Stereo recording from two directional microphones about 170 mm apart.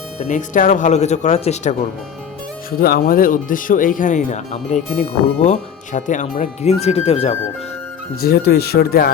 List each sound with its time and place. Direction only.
0.2 s speech: 45° left (ahead or behind)
2.6 s speech: 60° left (ahead or behind); by 7.3 s 35° left (ahead or behind)
8.2 s speech: 70° left (ahead or behind)